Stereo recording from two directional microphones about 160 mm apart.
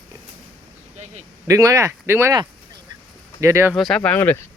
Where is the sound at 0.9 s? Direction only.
45° right (ahead or behind).